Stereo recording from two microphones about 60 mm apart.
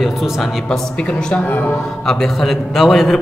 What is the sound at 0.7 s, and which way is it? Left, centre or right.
Speech, centre.